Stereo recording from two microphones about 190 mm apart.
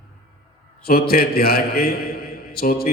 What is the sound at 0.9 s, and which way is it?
Mantra, 55° left (ahead or behind).